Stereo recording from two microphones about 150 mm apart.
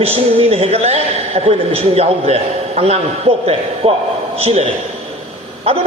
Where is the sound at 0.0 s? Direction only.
40° right (ahead or behind).